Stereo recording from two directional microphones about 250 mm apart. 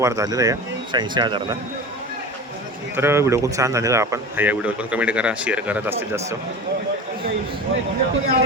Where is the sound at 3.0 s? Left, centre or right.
Centre.